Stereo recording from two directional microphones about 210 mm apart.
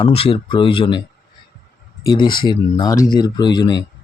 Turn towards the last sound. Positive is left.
turn(degrees=20)  # may be behind; listen again after turning